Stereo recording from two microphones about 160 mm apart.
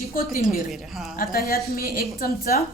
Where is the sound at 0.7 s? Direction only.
Centre (ahead or behind).